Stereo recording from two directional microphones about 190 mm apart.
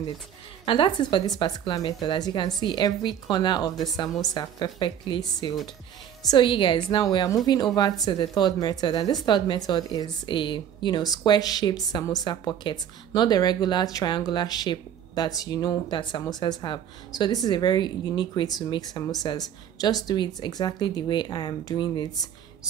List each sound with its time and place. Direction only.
0.7 s speech: 25° left (ahead or behind)